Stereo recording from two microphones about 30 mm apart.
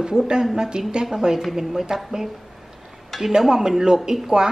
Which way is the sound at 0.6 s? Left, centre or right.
Right.